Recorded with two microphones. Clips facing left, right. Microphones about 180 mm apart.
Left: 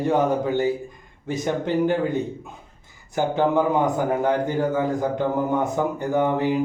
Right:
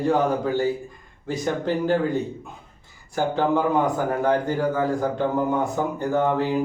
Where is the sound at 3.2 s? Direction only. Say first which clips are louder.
Left 1 dB; 15° left (ahead or behind).